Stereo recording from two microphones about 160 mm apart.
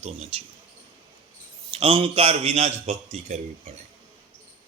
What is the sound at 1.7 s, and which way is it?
A man's voice, 35° right (ahead or behind).